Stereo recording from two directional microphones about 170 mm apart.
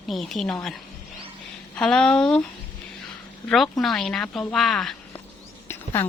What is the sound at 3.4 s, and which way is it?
A woman's voice, centre (ahead or behind).